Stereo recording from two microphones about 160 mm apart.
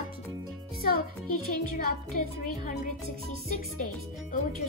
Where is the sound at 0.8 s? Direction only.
65° left (ahead or behind).